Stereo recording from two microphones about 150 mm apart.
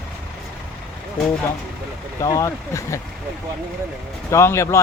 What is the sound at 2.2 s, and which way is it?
Speech, 25° left (ahead or behind).